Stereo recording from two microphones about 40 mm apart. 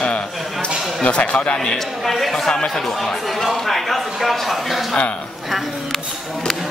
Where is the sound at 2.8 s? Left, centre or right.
Centre.